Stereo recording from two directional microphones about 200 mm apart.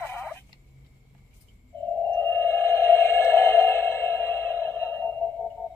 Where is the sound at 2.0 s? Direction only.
10° left (ahead or behind).